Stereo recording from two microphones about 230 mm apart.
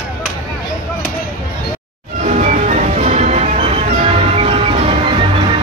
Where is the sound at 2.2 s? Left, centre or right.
Right.